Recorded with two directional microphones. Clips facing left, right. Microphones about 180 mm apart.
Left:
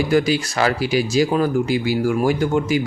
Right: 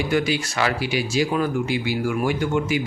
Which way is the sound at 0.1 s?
35° left (ahead or behind).